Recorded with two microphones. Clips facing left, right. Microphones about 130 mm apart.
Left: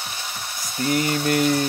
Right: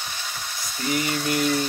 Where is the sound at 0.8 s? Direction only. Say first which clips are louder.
Left 4 dB; 50° left (ahead or behind).